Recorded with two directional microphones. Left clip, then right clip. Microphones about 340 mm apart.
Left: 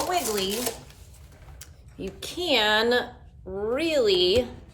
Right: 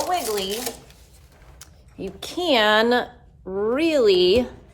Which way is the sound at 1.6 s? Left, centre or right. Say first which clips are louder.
Right 3 dB; centre.